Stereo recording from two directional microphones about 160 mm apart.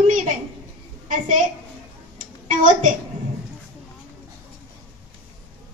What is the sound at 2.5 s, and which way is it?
Speech, 55° right (ahead or behind).